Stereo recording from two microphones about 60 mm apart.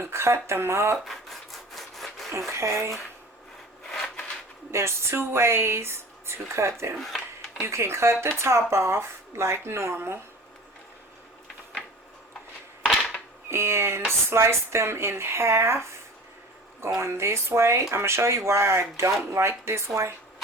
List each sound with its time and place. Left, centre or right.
0.0 s speech: right
1.0 s rub: centre
2.5 s speech: right
4.7 s speech: right
12.8 s a sound: centre
13.5 s speech: right
17.0 s speech: right